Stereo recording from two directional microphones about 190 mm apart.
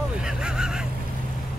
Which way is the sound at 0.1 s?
5° right (ahead or behind).